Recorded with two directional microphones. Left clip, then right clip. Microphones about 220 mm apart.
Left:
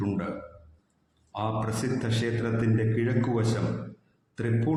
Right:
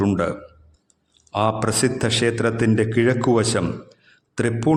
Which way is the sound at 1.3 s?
45° right (ahead or behind).